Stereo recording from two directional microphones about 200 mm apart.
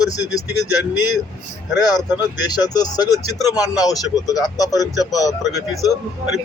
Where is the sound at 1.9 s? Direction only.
20° left (ahead or behind).